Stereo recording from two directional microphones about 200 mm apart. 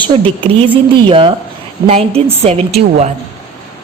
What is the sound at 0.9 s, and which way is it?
A woman's voice, 25° right (ahead or behind).